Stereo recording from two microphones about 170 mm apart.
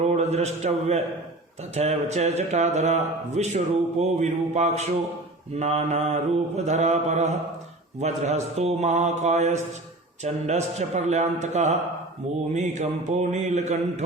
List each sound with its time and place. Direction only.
0.0 s a man's voice: 40° right (ahead or behind)